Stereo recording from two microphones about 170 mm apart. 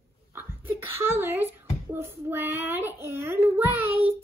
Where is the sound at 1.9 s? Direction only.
15° right (ahead or behind).